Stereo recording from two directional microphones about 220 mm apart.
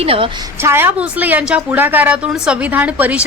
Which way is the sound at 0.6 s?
10° right (ahead or behind).